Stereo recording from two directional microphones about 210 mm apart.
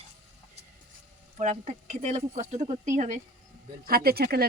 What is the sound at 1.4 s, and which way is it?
Speech, 35° right (ahead or behind).